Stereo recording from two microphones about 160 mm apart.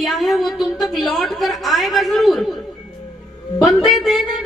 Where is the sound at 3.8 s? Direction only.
Centre (ahead or behind).